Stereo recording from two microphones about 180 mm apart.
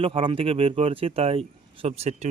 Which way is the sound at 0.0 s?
30° right (ahead or behind).